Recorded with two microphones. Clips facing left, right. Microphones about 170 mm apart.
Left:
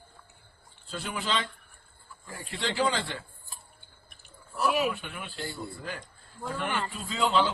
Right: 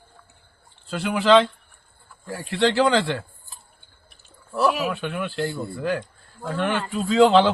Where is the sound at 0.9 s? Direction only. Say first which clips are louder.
Right 15 dB; 75° right (ahead or behind).